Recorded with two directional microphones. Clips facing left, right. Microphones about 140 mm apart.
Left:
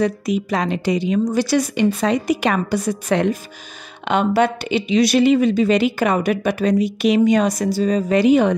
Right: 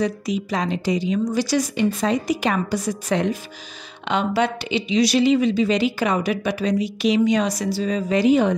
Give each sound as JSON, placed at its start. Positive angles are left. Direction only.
{"t": 0.0, "sound": "a woman's voice", "side_deg": 55}
{"t": 8.2, "sound": "a woman's voice", "side_deg": 65}